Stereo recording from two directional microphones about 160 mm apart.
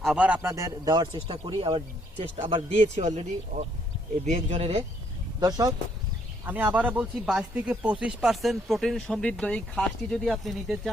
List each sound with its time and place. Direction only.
0.0 s speech: 5° right (ahead or behind); by 4.8 s 40° right (ahead or behind)
5.4 s speech: 25° right (ahead or behind)
6.4 s speech: 10° right (ahead or behind)